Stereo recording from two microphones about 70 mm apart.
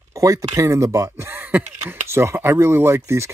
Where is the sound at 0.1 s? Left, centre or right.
Right.